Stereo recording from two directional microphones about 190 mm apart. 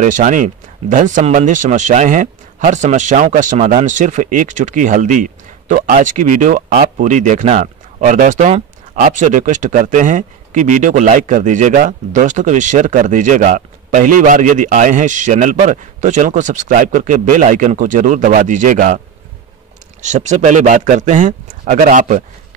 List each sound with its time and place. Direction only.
0.0 s speech: 40° right (ahead or behind)
20.0 s speech: 40° right (ahead or behind)